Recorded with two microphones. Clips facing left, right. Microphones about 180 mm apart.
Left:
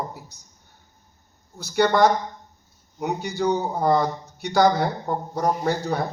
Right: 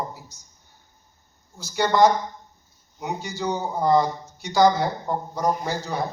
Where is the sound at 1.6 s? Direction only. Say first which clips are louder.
Even; 60° left (ahead or behind).